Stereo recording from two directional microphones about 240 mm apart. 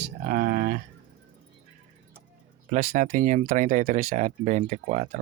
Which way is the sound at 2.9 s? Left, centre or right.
Right.